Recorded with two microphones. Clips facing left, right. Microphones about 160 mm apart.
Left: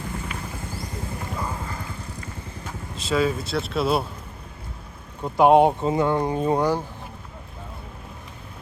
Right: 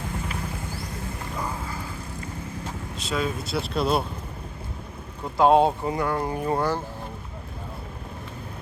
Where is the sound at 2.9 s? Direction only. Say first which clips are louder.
Left 6 dB; centre (ahead or behind).